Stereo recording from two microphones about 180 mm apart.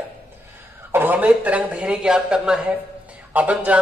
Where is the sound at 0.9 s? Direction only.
10° right (ahead or behind).